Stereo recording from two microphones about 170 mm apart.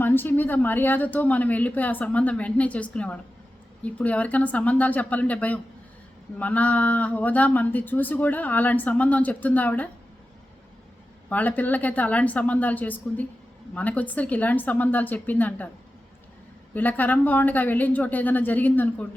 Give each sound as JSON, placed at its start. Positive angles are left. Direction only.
{"t": 0.0, "sound": "speech", "side_deg": 10}
{"t": 11.3, "sound": "speech", "side_deg": 10}
{"t": 16.7, "sound": "speech", "side_deg": 10}